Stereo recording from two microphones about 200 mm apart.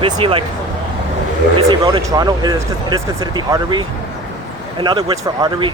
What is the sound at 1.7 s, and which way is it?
Speech, 20° right (ahead or behind).